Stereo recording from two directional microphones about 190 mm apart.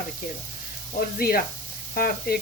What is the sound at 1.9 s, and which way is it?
Speech, 50° left (ahead or behind).